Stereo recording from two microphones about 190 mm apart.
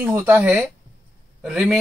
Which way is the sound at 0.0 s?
10° right (ahead or behind).